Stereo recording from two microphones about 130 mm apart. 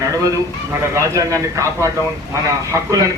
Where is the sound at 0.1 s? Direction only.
25° right (ahead or behind).